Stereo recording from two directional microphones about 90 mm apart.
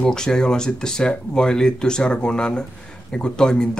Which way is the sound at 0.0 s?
5° left (ahead or behind).